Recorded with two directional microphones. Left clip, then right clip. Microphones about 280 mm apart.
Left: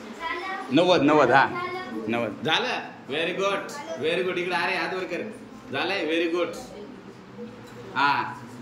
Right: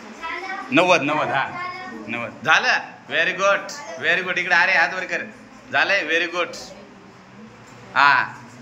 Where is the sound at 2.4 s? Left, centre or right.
Centre.